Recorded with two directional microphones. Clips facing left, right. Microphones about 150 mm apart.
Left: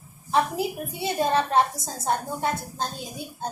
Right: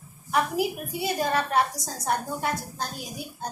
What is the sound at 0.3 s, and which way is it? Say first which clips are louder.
A woman's voice: left 1 dB; 25° left (ahead or behind).